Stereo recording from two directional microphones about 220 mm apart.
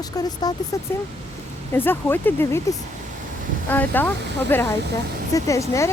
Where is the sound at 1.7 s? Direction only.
10° left (ahead or behind).